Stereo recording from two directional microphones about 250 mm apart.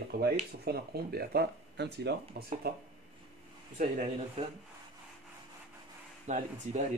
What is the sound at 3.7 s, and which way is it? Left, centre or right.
Speech, right.